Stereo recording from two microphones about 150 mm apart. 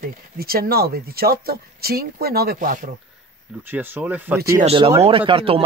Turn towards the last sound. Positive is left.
turn(degrees=-35)  # may be behind; listen again after turning